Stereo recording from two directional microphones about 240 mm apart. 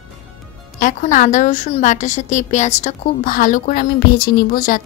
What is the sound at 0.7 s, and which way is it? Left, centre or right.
A woman's voice, left.